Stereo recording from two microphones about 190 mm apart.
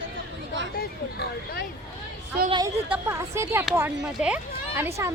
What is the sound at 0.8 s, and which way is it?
Speech, 60° left (ahead or behind).